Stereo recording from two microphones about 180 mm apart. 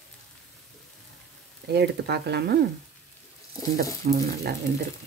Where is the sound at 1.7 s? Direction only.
65° right (ahead or behind).